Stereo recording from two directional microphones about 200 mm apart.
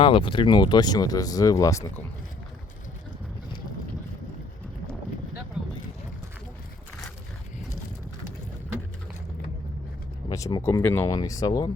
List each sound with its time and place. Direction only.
0.0 s speech: 25° left (ahead or behind)
5.6 s boat: centre (ahead or behind)
10.2 s speech: 20° left (ahead or behind)